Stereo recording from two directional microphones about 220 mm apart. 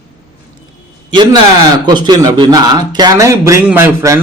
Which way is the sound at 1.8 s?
20° right (ahead or behind).